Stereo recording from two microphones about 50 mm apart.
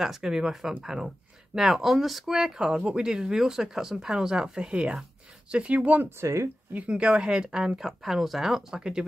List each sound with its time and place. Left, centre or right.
0.0 s speech: centre; by 6.0 s right
6.0 s speech: right
6.9 s speech: centre